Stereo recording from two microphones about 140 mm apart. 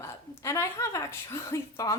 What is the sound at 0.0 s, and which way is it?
A woman's voice, 20° left (ahead or behind).